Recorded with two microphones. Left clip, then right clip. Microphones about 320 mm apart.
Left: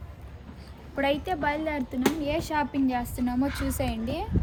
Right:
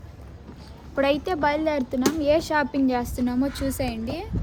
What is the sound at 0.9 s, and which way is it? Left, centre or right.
A child's voice, centre.